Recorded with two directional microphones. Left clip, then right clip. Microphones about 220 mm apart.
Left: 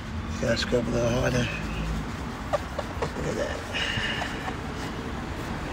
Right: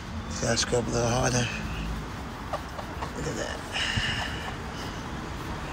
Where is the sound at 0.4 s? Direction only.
15° right (ahead or behind).